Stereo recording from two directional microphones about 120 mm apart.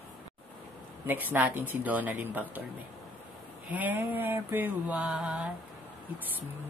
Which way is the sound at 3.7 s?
15° right (ahead or behind).